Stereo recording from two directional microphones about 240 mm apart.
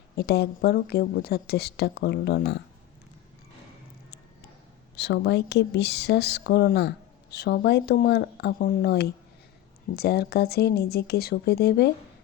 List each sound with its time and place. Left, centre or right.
0.2 s speech: left
4.9 s speech: left